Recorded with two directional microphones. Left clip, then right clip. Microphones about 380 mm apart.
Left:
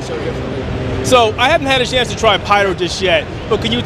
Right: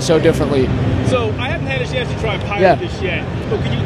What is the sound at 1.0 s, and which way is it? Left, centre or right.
Speech, left.